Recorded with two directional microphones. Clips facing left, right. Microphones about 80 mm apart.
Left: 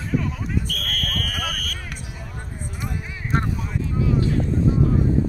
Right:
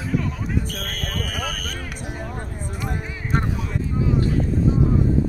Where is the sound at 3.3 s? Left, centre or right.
Centre.